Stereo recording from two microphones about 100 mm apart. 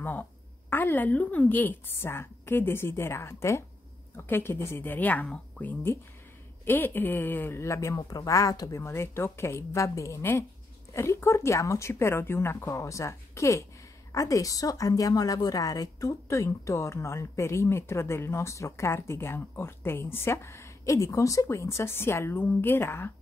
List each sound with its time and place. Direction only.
0.0 s a woman's voice: 20° left (ahead or behind)